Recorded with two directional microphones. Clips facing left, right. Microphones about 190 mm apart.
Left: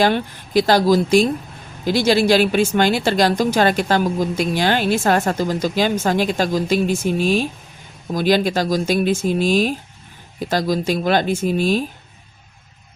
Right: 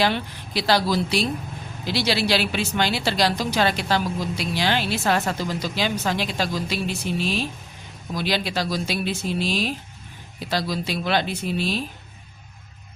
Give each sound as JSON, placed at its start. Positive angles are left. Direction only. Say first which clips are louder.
{"t": 0.0, "sound": "a woman's voice", "louder": "left 5 dB", "side_deg": 50}